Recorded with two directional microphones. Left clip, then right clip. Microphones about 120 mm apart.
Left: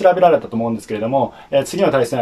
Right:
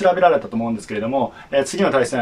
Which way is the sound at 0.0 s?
30° left (ahead or behind).